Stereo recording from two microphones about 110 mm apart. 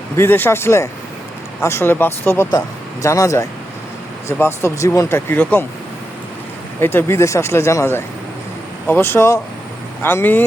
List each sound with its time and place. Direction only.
0.2 s speech: 20° left (ahead or behind)
6.7 s speech: 20° left (ahead or behind)